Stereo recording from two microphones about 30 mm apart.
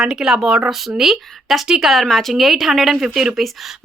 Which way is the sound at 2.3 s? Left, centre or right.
Centre.